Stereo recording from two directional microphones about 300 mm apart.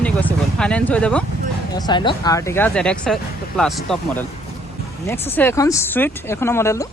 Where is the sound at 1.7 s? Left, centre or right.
Centre.